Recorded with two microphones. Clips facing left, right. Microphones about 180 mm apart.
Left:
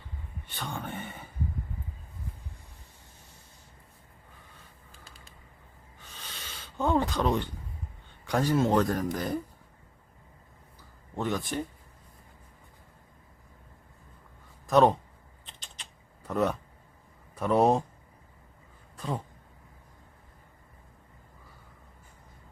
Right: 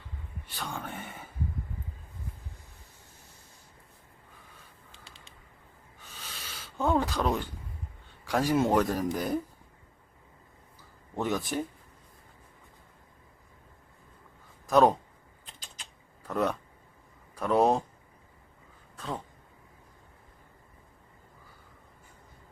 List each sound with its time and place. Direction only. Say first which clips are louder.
0.4 s speech: left 1 dB; centre (ahead or behind)
6.2 s a sound: even; 5° right (ahead or behind)
8.2 s speech: even; 5° right (ahead or behind)
11.2 s speech: right 1 dB; 5° right (ahead or behind)
14.7 s speech: even; centre (ahead or behind)
16.2 s speech: left 1 dB; centre (ahead or behind)
18.9 s speech: left 3 dB; 10° left (ahead or behind)